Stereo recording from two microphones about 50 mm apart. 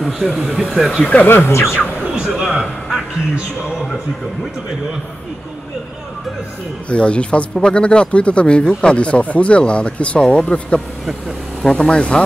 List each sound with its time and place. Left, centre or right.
0.0 s speech: centre
1.2 s speech: left
1.7 s speech: right
2.5 s a sound: centre
6.9 s speech: left